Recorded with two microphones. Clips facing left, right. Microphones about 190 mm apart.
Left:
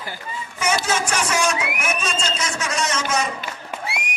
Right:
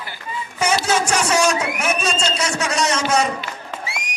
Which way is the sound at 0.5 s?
35° right (ahead or behind).